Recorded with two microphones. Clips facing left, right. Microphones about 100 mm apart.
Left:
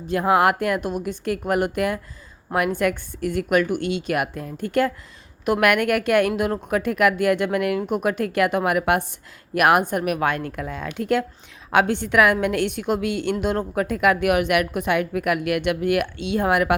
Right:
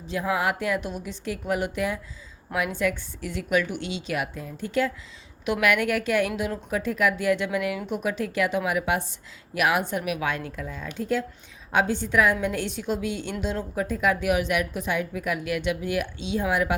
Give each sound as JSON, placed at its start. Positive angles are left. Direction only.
{"t": 0.1, "sound": "a woman's voice", "side_deg": 60}